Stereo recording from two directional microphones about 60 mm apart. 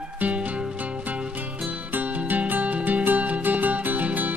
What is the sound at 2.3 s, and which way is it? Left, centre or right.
Music, right.